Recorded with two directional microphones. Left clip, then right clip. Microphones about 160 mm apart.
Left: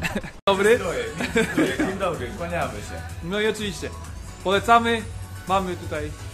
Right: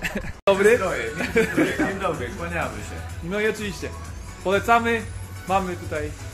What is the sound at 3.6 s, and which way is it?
A man's voice, centre (ahead or behind).